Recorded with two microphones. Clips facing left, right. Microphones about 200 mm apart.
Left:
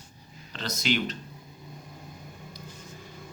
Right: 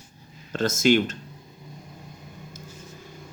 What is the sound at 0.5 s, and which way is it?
Speech, 45° right (ahead or behind).